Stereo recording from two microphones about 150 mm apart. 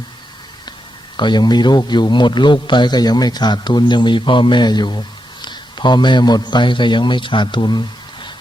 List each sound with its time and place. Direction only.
1.1 s a man's voice: 30° left (ahead or behind)